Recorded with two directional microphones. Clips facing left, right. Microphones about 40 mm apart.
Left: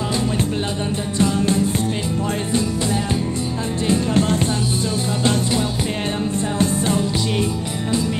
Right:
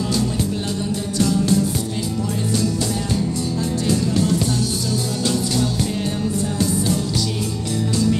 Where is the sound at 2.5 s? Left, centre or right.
Left.